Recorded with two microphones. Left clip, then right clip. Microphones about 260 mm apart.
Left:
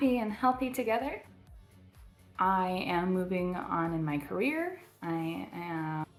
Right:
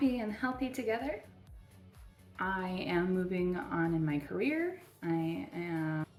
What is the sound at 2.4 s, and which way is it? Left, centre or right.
Speech, centre.